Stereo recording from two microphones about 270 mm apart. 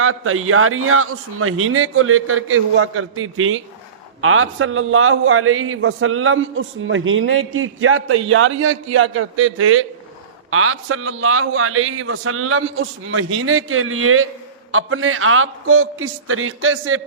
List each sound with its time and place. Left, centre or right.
0.0 s a man's voice: right